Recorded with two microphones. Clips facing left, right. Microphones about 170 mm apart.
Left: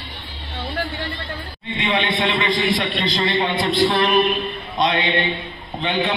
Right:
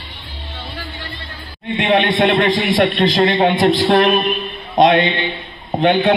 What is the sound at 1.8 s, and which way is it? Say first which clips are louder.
Speech: right 7 dB; 65° right (ahead or behind).